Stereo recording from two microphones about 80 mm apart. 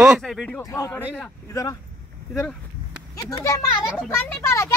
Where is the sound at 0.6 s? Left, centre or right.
Left.